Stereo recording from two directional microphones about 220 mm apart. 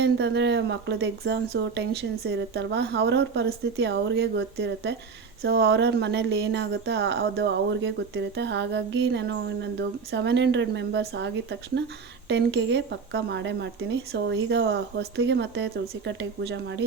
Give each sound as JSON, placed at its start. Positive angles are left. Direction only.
{"t": 0.0, "sound": "speech", "side_deg": -50}
{"t": 12.3, "sound": "speech", "side_deg": -50}